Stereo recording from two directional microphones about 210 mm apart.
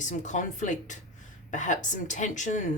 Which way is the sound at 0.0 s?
35° left (ahead or behind).